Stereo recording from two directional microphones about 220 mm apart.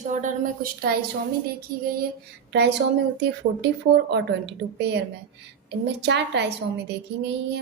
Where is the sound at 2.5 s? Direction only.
50° right (ahead or behind).